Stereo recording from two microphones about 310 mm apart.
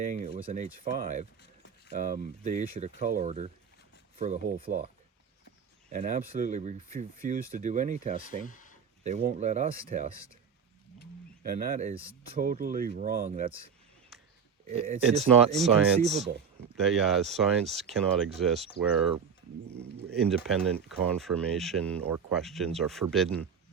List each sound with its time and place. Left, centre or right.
0.0 s speech: right
5.9 s speech: right
8.4 s a sound: left
9.0 s speech: right
11.4 s speech: right
14.7 s speech: right
16.9 s speech: centre